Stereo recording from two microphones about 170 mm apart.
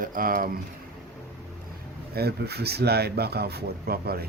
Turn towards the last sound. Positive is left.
turn(degrees=-65)  # may be behind; listen again after turning